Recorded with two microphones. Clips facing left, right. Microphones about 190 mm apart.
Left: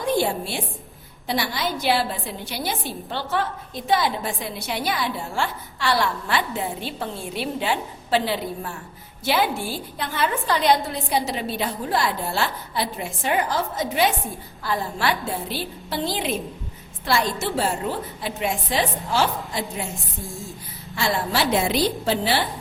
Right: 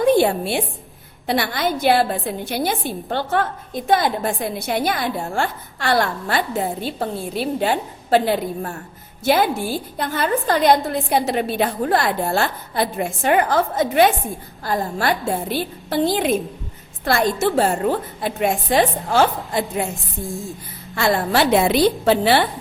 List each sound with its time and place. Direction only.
0.0 s a woman's voice: 60° right (ahead or behind)
14.6 s a woman's voice: 45° right (ahead or behind)
20.9 s a woman's voice: 55° right (ahead or behind)